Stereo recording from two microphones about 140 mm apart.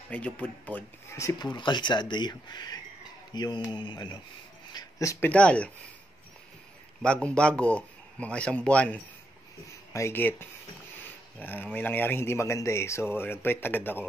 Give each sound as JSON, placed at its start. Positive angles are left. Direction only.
{"t": 0.1, "sound": "speech", "side_deg": 10}
{"t": 1.5, "sound": "speech", "side_deg": 35}
{"t": 5.3, "sound": "speech", "side_deg": 10}
{"t": 7.0, "sound": "speech", "side_deg": 10}